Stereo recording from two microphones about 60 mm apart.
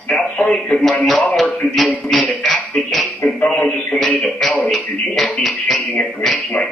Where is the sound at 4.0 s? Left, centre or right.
Centre.